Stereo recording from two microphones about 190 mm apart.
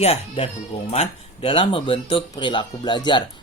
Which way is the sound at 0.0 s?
30° left (ahead or behind).